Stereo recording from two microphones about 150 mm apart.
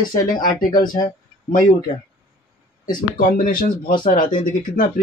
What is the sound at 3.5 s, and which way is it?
Speech, 70° left (ahead or behind).